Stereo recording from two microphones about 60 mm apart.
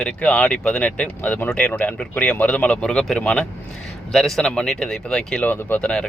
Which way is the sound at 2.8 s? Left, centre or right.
Centre.